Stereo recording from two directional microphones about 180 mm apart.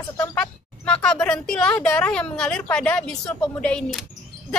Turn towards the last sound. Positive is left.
turn(degrees=5)  # may be behind; listen again after turning